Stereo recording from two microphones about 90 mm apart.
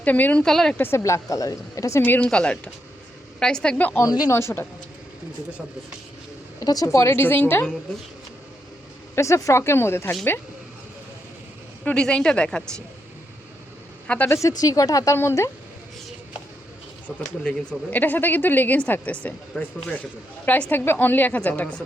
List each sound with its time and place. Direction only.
0.0 s a woman's voice: 20° left (ahead or behind)
0.4 s speech: 5° left (ahead or behind)
0.8 s speech: 30° left (ahead or behind)
2.0 s a woman's voice: 20° left (ahead or behind)
4.0 s speech: 45° left (ahead or behind)
4.3 s a woman's voice: 30° left (ahead or behind)
6.6 s a woman's voice: 40° left (ahead or behind); by 7.7 s 20° left (ahead or behind)
9.1 s a woman's voice: 30° left (ahead or behind)
11.9 s a woman's voice: 10° left (ahead or behind)
14.1 s a woman's voice: 15° left (ahead or behind)
14.4 s speech: 40° left (ahead or behind)
17.1 s a woman's voice: 15° left (ahead or behind)